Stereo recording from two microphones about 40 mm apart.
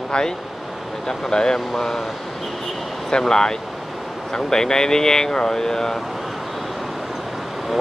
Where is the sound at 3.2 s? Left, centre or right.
Centre.